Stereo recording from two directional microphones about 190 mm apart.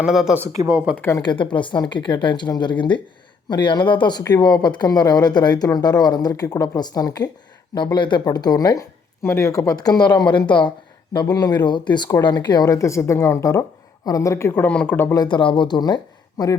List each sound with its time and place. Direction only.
0.0 s speech: centre (ahead or behind)
0.4 s speech: 20° right (ahead or behind)
0.9 s speech: 10° left (ahead or behind)
1.2 s speech: 25° left (ahead or behind)